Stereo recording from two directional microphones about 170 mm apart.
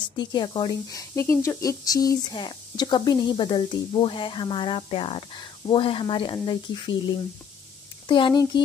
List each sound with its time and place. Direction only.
0.0 s speech: 25° left (ahead or behind)